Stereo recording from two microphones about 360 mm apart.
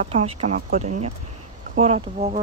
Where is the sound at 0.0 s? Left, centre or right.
Centre.